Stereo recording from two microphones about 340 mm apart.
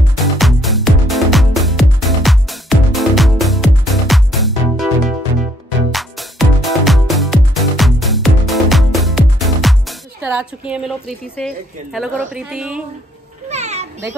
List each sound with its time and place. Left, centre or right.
0.2 s music: centre
5.9 s music: centre
13.5 s a sound: centre